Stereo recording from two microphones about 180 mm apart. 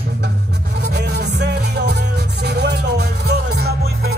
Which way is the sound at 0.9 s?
70° right (ahead or behind).